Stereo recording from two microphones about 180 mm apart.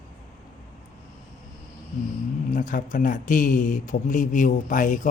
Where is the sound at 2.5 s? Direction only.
45° left (ahead or behind).